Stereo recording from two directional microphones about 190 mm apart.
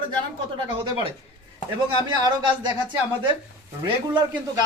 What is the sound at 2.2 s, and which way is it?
Speech, 20° right (ahead or behind).